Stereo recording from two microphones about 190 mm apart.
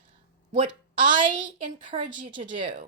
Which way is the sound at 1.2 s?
45° right (ahead or behind).